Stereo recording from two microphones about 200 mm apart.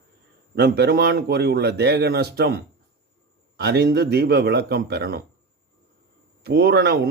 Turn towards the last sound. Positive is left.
turn(degrees=-55)  # may be behind; listen again after turning